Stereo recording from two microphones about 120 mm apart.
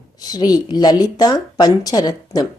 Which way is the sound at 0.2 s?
35° left (ahead or behind).